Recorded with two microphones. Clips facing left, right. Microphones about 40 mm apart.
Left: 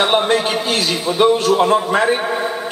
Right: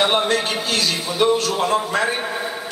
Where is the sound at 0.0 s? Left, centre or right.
Centre.